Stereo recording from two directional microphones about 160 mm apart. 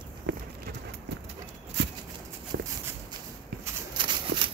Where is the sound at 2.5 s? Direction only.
90° right.